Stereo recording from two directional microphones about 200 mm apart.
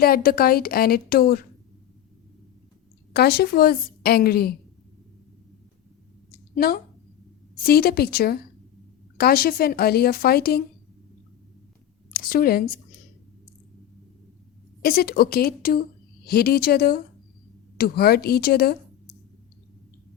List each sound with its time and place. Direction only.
0.0 s a woman's voice: 50° left (ahead or behind)
3.1 s a woman's voice: 50° left (ahead or behind)
7.6 s a woman's voice: 50° left (ahead or behind)
12.1 s speech: 45° left (ahead or behind)
14.8 s a woman's voice: 50° left (ahead or behind)